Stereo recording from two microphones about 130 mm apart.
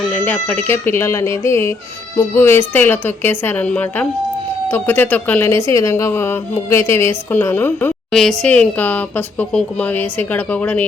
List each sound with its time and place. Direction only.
0.1 s a woman's voice: 15° left (ahead or behind)
8.1 s speech: 5° left (ahead or behind)